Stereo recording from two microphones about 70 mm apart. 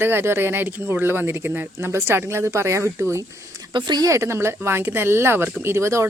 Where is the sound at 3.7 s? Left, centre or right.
Right.